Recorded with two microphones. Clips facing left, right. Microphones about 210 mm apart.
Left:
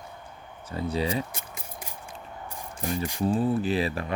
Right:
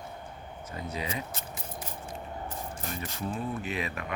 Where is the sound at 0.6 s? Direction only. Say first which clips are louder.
Left 8 dB; 30° left (ahead or behind).